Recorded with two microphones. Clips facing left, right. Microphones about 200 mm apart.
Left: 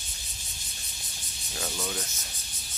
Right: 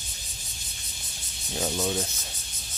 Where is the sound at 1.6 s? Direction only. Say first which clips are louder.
Right 7 dB; 25° right (ahead or behind).